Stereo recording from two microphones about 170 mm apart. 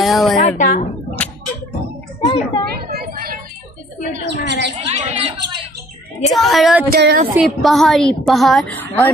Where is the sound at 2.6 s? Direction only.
65° right (ahead or behind).